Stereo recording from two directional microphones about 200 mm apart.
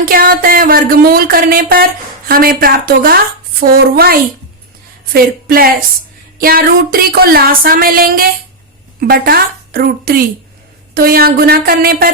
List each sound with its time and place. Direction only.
0.0 s music: 45° right (ahead or behind)
9.0 s a woman's voice: 45° right (ahead or behind)
10.9 s music: 50° right (ahead or behind)